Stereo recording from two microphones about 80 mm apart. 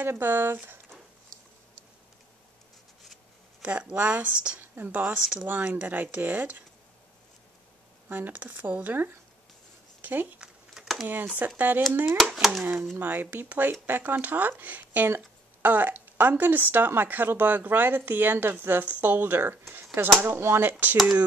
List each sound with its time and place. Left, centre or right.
0.0 s speech: right
3.6 s speech: centre
5.5 s speech: right
8.1 s speech: right
10.4 s a sound: centre
11.3 s speech: right
12.4 s speech: centre
12.9 s speech: right